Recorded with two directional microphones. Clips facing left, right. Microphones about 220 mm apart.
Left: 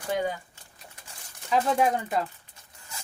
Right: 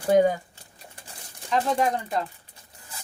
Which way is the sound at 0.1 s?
45° right (ahead or behind).